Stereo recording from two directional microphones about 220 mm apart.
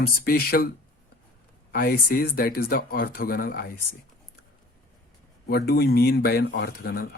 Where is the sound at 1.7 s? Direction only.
40° left (ahead or behind).